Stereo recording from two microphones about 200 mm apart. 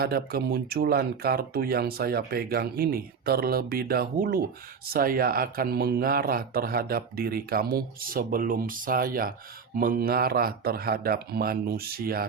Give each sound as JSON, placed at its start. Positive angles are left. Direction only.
{"t": 0.0, "sound": "speech", "side_deg": -50}